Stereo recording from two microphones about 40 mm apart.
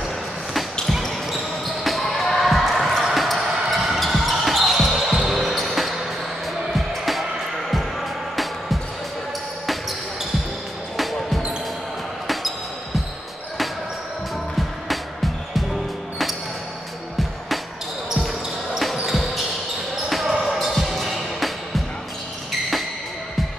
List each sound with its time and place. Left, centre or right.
1.8 s basketball bounce: centre
4.0 s basketball bounce: centre
5.0 s basketball bounce: centre
5.3 s basketball bounce: centre
6.7 s music: centre
11.0 s basketball bounce: centre
19.0 s basketball bounce: centre
20.6 s music: centre